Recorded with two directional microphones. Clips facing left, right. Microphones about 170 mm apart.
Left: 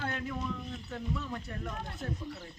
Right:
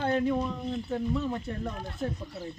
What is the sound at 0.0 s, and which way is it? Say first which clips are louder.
Speech: right 10 dB; 30° right (ahead or behind).